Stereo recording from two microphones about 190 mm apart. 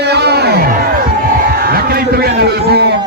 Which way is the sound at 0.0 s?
60° right (ahead or behind).